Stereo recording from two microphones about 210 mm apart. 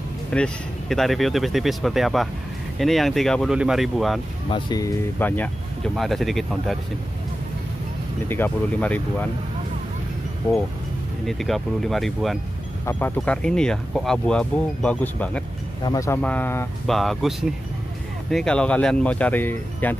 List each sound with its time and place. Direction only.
0.3 s speech: 5° left (ahead or behind)
4.5 s speech: 20° left (ahead or behind); by 6.8 s centre (ahead or behind)
8.3 s speech: 10° left (ahead or behind)
11.2 s speech: centre (ahead or behind)